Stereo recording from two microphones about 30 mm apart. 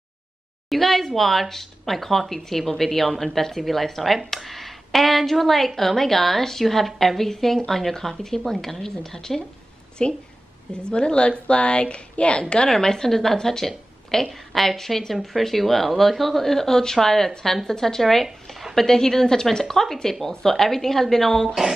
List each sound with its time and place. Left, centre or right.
0.7 s a woman's voice: centre
10.0 s speech: left
12.6 s speech: centre
14.2 s a woman's voice: centre
18.9 s a woman's voice: centre